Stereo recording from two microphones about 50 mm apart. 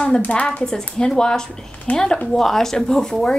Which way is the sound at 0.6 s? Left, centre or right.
Centre.